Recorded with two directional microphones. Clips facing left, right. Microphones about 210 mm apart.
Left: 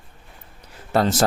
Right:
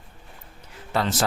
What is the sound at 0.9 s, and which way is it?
Speech, 40° left (ahead or behind).